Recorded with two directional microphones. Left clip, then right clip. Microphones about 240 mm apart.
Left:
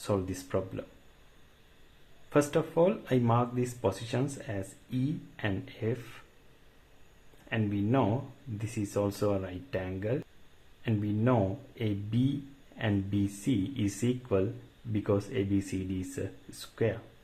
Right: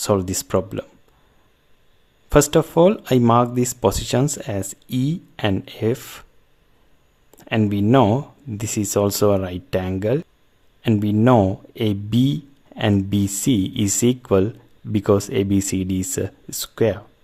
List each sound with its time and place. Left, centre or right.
0.0 s speech: right
2.3 s speech: right
7.4 s speech: right